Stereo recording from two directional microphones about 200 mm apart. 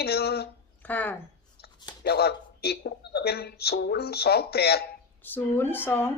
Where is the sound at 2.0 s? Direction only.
55° left (ahead or behind).